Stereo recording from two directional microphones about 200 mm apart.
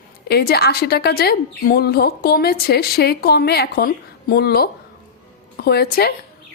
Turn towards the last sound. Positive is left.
turn(degrees=50)  # may be behind; listen again after turning